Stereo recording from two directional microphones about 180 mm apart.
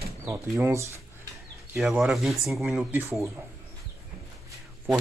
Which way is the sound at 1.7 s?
Centre (ahead or behind).